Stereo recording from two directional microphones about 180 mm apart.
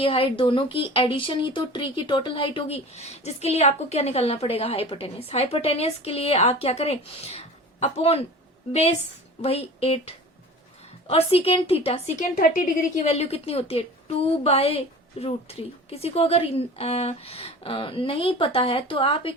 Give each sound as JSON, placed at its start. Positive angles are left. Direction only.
{"t": 0.0, "sound": "speech", "side_deg": 30}
{"t": 9.4, "sound": "speech", "side_deg": 35}
{"t": 12.4, "sound": "speech", "side_deg": 50}